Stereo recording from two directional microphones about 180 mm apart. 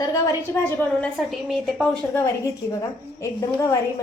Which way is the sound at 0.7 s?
15° left (ahead or behind).